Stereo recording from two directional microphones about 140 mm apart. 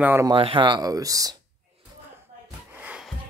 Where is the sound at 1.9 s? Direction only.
25° right (ahead or behind).